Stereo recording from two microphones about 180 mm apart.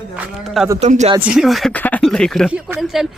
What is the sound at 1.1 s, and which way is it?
Speech, 5° right (ahead or behind).